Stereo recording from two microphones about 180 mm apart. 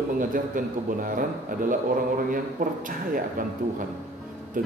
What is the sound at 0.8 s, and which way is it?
Speech, 50° right (ahead or behind).